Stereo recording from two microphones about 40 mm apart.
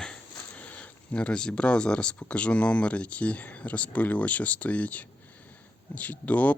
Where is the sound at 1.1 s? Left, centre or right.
Left.